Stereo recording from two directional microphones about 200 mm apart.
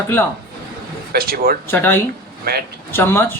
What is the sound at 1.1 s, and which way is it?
Speech, 50° right (ahead or behind).